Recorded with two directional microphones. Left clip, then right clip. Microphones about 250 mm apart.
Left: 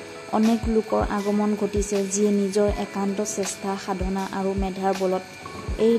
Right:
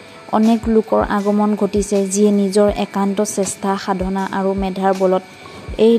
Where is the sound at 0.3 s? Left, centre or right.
Centre.